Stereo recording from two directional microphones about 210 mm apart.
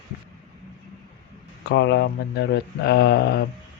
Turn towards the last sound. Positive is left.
turn(degrees=45)  # may be behind; listen again after turning